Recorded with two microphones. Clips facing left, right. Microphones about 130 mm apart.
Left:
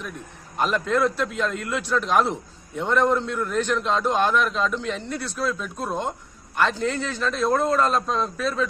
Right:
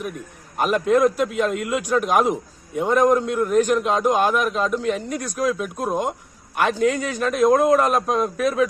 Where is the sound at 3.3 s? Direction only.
45° right (ahead or behind).